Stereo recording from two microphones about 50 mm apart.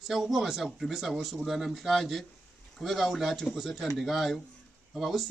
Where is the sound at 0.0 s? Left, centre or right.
Centre.